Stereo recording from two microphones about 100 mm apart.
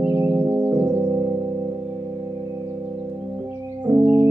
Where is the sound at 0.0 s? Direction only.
20° right (ahead or behind).